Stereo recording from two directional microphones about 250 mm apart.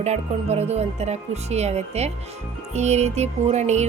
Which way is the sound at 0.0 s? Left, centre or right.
Right.